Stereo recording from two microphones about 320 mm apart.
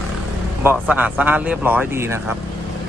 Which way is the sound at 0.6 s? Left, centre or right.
Centre.